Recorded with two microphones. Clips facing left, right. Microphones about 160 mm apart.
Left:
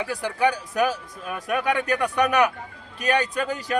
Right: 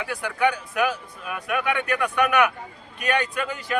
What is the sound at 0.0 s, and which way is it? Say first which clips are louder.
A man's voice: left 1 dB; 35° left (ahead or behind).